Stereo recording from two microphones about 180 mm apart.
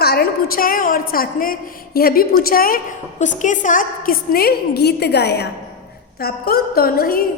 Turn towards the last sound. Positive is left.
turn(degrees=55)  # may be behind; listen again after turning